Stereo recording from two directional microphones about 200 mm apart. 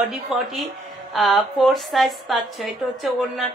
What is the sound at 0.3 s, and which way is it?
A woman's voice, centre (ahead or behind).